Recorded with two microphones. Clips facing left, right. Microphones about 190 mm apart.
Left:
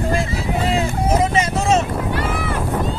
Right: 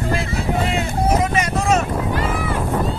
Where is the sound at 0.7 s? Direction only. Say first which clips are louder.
Left 2 dB; 25° left (ahead or behind).